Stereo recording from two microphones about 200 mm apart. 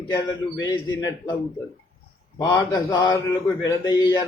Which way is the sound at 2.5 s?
20° left (ahead or behind).